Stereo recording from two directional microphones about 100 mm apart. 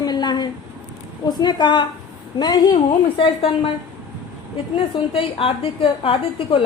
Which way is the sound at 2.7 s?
75° left (ahead or behind).